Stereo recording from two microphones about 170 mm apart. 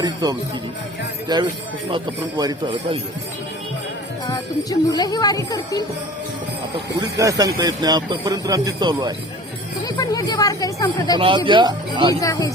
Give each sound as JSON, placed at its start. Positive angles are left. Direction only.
{"t": 0.0, "sound": "speech", "side_deg": -25}
{"t": 4.3, "sound": "speech", "side_deg": 20}
{"t": 7.2, "sound": "speech", "side_deg": -20}
{"t": 9.8, "sound": "speech", "side_deg": 20}
{"t": 11.2, "sound": "speech", "side_deg": -30}
{"t": 12.2, "sound": "speech", "side_deg": 20}